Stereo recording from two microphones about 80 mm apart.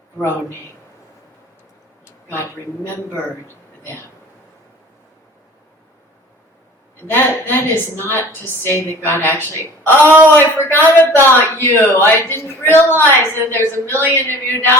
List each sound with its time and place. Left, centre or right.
0.2 s a man's voice: left
7.1 s speech: left